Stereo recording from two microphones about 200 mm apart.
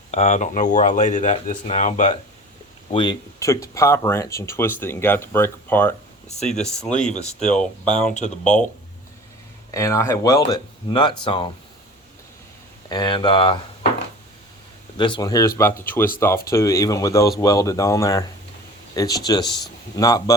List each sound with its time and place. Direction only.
0.1 s speech: 35° left (ahead or behind)
2.9 s speech: 20° left (ahead or behind)
6.2 s speech: 35° left (ahead or behind)
6.5 s speech: 5° left (ahead or behind)
9.7 s speech: 15° left (ahead or behind)
12.9 s speech: 20° left (ahead or behind)
14.9 s speech: 25° left (ahead or behind)